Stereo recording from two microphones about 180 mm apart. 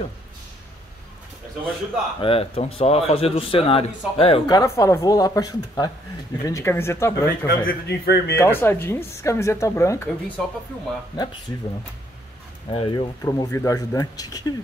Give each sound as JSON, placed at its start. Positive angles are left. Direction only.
{"t": 2.1, "sound": "a man's voice", "side_deg": 30}
{"t": 4.6, "sound": "speech", "side_deg": 15}
{"t": 7.4, "sound": "a man's voice", "side_deg": 60}
{"t": 8.4, "sound": "speech", "side_deg": 10}
{"t": 12.6, "sound": "speech", "side_deg": 30}